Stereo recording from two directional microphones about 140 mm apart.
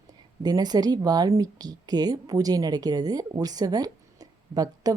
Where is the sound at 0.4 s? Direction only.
30° right (ahead or behind).